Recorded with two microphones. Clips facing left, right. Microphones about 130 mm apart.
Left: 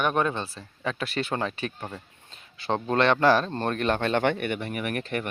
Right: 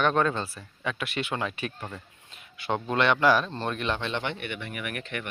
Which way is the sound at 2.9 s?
40° left (ahead or behind).